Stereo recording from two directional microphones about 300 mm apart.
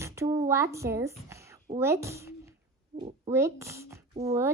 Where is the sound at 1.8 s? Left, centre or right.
Centre.